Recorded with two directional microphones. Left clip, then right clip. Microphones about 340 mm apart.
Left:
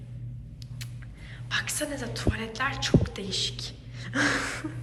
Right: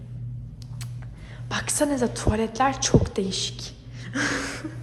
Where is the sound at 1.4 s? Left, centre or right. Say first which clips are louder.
Right 5 dB; centre.